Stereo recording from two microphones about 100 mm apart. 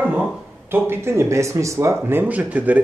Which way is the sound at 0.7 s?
25° right (ahead or behind).